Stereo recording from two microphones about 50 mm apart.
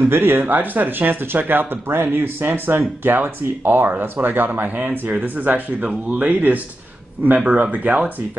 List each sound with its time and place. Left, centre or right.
0.0 s speech: right